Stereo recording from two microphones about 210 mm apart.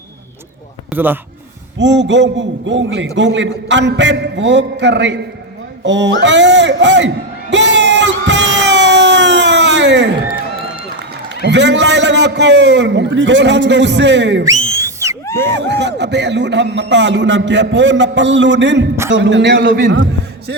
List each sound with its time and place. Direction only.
0.9 s speech: 10° right (ahead or behind)
1.8 s a man's voice: 60° right (ahead or behind)
7.5 s a sound: 55° right (ahead or behind)
11.4 s a man's voice: 55° right (ahead or behind)
14.7 s a sound: 15° right (ahead or behind)
15.4 s a man's voice: 55° right (ahead or behind)